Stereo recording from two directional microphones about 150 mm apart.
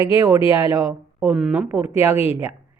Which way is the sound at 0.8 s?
5° right (ahead or behind).